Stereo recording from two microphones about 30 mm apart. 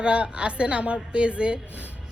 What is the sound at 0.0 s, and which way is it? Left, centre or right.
A woman's voice, right.